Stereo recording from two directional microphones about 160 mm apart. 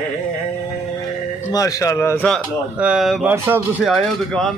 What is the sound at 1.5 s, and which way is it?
Speech, 20° left (ahead or behind).